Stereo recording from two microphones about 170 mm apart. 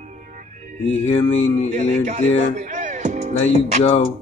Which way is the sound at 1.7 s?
45° right (ahead or behind).